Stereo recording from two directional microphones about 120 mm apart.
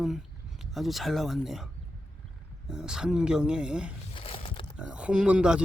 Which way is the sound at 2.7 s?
5° right (ahead or behind).